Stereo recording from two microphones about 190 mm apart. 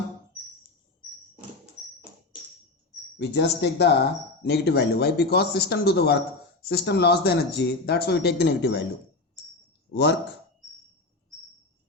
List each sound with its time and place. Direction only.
3.2 s speech: 65° left (ahead or behind)
9.9 s speech: 65° left (ahead or behind)